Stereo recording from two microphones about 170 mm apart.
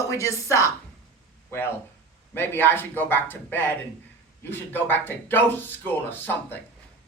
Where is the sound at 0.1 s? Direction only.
20° left (ahead or behind).